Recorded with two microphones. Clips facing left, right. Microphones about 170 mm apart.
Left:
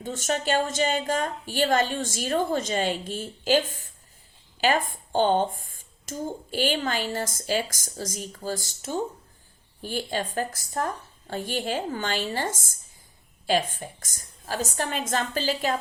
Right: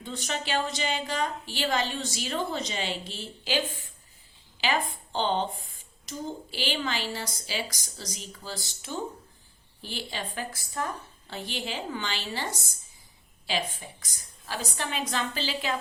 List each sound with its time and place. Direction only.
0.0 s a woman's voice: 45° left (ahead or behind)